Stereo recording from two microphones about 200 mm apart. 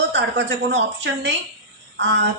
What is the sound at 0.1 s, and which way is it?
A woman's voice, 65° right (ahead or behind).